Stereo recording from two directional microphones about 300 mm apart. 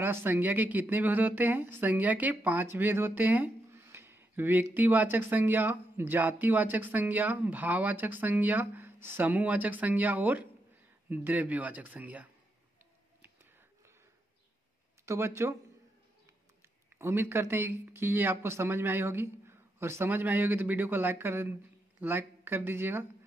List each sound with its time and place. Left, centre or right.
0.0 s speech: centre
13.2 s whispering: centre
15.0 s speech: centre
17.0 s speech: centre